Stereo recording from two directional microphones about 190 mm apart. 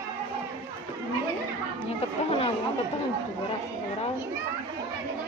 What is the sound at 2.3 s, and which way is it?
Speech, 30° left (ahead or behind).